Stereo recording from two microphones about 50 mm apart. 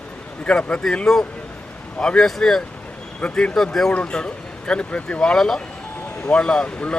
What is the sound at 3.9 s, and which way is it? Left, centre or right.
Speech, left.